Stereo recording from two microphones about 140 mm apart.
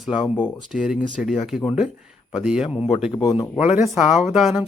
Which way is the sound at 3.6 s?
55° left (ahead or behind).